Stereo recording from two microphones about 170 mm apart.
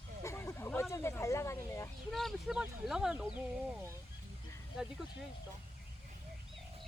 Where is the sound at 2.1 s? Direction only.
Centre (ahead or behind).